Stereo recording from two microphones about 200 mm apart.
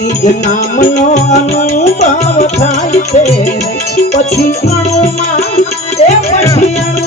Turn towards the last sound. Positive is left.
turn(degrees=30)  # may be behind; listen again after turning